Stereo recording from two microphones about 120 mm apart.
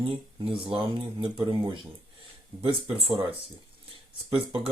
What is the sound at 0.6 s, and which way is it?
Speech, 45° right (ahead or behind).